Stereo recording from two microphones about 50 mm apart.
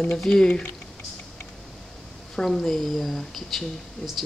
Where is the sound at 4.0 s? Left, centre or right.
Centre.